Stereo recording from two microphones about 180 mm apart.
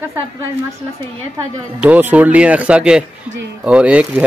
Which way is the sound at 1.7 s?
10° right (ahead or behind).